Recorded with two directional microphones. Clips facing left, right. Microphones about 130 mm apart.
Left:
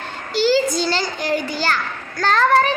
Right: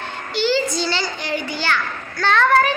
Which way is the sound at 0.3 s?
40° left (ahead or behind).